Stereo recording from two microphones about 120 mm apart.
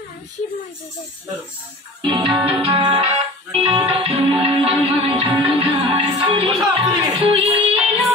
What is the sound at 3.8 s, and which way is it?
Music, 50° right (ahead or behind).